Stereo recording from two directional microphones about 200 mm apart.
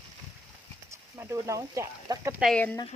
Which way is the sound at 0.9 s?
15° right (ahead or behind).